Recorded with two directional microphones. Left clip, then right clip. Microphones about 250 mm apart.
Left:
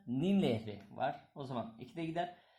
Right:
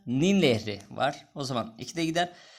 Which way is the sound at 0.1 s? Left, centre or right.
Right.